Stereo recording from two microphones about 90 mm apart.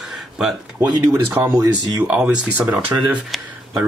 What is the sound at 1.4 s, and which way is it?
Speech, 45° right (ahead or behind).